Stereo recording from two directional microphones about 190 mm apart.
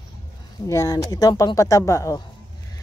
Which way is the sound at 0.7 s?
20° left (ahead or behind).